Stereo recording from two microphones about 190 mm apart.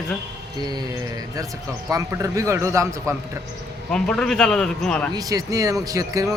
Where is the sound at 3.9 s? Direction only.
5° left (ahead or behind).